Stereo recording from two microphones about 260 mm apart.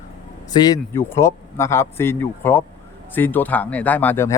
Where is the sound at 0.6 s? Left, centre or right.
Centre.